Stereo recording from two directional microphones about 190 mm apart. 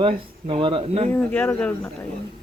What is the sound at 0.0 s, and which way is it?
Speech, 25° right (ahead or behind).